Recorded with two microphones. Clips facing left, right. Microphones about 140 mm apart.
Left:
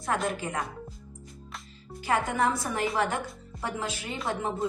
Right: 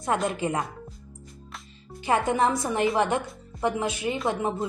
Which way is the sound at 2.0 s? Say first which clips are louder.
Right 3 dB; 20° right (ahead or behind).